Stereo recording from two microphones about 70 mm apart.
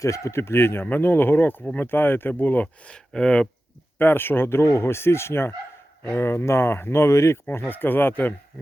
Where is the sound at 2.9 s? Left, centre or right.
Centre.